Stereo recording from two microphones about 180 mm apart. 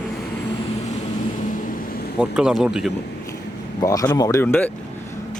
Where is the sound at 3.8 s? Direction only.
20° left (ahead or behind).